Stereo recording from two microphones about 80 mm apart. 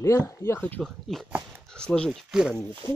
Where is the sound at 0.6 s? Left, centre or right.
Left.